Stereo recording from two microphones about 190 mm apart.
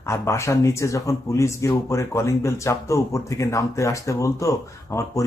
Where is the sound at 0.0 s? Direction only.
15° left (ahead or behind).